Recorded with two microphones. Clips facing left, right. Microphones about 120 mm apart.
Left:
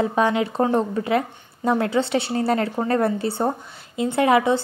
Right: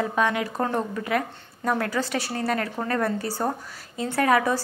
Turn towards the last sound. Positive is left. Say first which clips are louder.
# left 4 dB
turn(degrees=25)  # may be behind; listen again after turning